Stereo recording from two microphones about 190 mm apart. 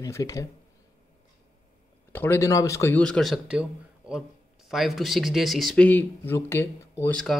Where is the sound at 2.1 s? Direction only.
10° left (ahead or behind).